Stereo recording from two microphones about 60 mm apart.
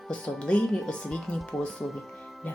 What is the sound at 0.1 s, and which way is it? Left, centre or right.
Speech, centre.